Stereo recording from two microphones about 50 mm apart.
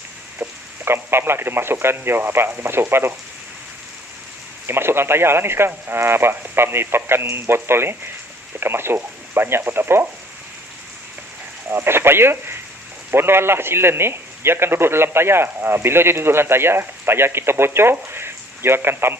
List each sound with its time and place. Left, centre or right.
0.4 s a man's voice: right
4.6 s a man's voice: right
11.7 s a man's voice: right